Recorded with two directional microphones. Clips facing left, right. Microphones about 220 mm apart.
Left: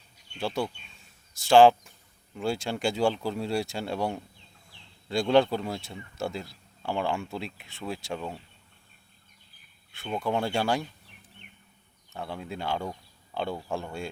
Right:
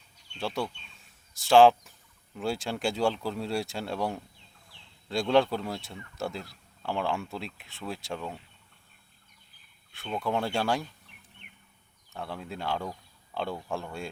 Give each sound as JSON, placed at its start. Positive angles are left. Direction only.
{"t": 0.3, "sound": "speech", "side_deg": 0}
{"t": 10.2, "sound": "speech", "side_deg": 0}
{"t": 11.4, "sound": "bird", "side_deg": 35}
{"t": 12.1, "sound": "speech", "side_deg": 0}